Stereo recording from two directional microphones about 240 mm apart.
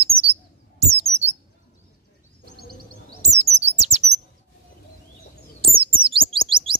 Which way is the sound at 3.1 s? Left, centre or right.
Right.